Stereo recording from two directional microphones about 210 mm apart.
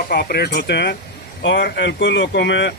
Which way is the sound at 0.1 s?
50° left (ahead or behind).